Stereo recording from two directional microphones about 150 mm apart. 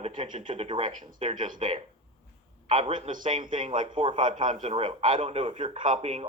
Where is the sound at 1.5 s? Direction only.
35° right (ahead or behind).